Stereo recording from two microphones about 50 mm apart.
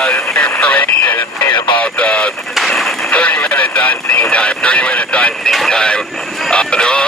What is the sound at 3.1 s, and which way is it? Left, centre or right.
Radio, left.